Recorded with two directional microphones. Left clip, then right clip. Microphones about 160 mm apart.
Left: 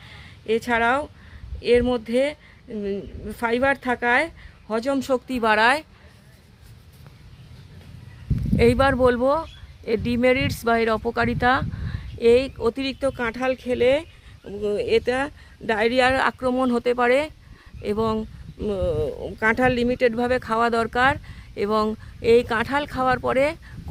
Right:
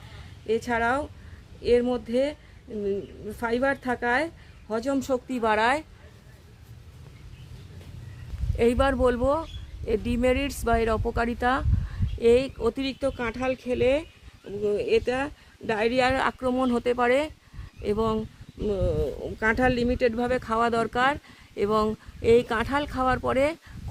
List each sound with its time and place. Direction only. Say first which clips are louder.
0.4 s speech: left 4 dB; 25° left (ahead or behind)
8.5 s speech: left 5 dB; 20° left (ahead or behind)